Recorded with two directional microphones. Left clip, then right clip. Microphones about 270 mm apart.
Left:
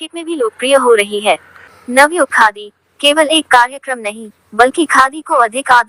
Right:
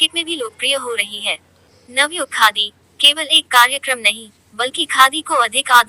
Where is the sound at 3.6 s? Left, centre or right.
Centre.